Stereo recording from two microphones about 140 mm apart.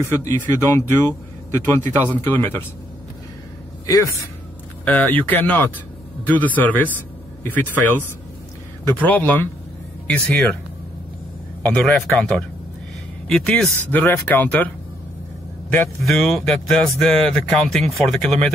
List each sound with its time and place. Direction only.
0.4 s speech: 20° left (ahead or behind)
3.8 s a man's voice: 25° left (ahead or behind)
4.8 s speech: 10° left (ahead or behind)
8.8 s speech: 10° left (ahead or behind)
11.6 s speech: 5° left (ahead or behind)
16.0 s speech: centre (ahead or behind)